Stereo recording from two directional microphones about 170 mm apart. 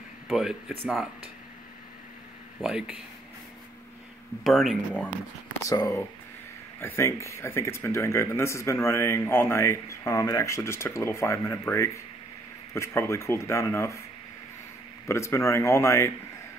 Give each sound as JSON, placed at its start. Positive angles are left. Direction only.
{"t": 0.3, "sound": "speech", "side_deg": -5}
{"t": 2.6, "sound": "speech", "side_deg": -5}
{"t": 4.5, "sound": "speech", "side_deg": 0}
{"t": 5.6, "sound": "speech", "side_deg": 20}
{"t": 15.0, "sound": "speech", "side_deg": 15}